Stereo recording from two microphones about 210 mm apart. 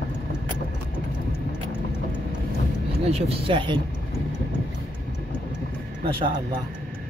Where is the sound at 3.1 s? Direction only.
25° right (ahead or behind).